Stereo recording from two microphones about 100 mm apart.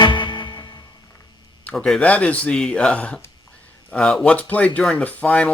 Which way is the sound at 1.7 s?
5° left (ahead or behind).